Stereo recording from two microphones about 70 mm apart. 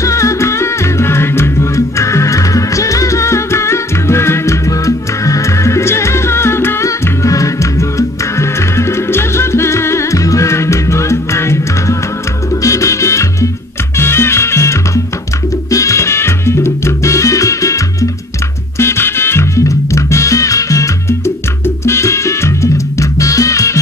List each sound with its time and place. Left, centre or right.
0.0 s music: left
6.9 s music: left
15.7 s salsa music: left
18.8 s music: left
21.6 s music: left